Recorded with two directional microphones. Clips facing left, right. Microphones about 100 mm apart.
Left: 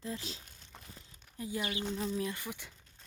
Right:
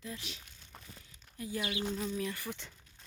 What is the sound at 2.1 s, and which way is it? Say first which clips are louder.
Speech: left 1 dB; 20° left (ahead or behind).